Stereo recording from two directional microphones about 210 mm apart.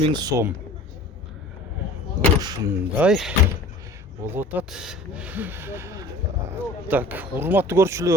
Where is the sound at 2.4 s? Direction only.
20° right (ahead or behind).